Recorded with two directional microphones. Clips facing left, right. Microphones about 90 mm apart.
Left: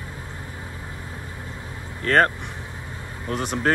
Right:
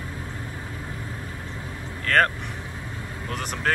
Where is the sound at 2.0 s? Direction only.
25° left (ahead or behind).